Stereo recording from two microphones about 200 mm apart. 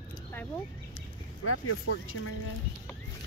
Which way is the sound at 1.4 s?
90° left.